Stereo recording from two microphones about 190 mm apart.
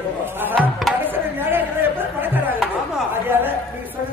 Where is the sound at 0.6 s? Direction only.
Centre (ahead or behind).